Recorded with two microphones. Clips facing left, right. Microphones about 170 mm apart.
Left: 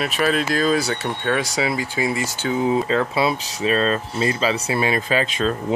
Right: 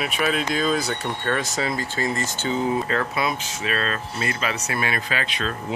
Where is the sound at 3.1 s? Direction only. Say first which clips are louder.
Left 4 dB; 30° left (ahead or behind).